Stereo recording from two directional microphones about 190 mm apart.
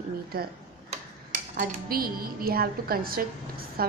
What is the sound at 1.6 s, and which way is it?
A woman's voice, 50° right (ahead or behind).